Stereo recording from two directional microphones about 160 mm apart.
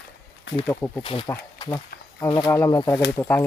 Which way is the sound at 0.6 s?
10° left (ahead or behind).